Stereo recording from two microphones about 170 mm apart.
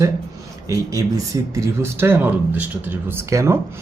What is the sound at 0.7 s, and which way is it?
Speech, 20° right (ahead or behind).